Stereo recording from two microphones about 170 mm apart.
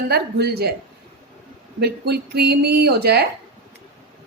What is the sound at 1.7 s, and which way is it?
A woman's voice, 70° right (ahead or behind).